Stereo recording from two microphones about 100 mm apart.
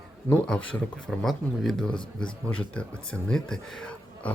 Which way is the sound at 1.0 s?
5° left (ahead or behind).